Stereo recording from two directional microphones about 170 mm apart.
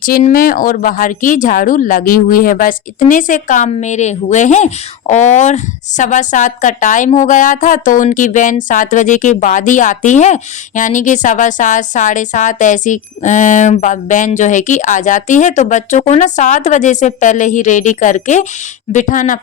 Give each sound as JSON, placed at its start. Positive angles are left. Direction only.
{"t": 0.0, "sound": "speech", "side_deg": 50}